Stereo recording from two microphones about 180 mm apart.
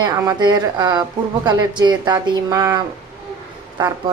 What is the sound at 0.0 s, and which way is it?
Speech, 20° right (ahead or behind).